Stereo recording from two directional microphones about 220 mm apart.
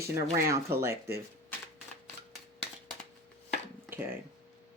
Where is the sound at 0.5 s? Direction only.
10° right (ahead or behind).